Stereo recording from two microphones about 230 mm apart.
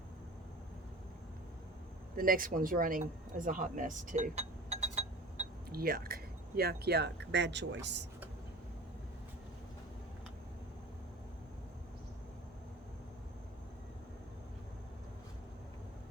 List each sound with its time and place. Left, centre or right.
2.1 s speech: right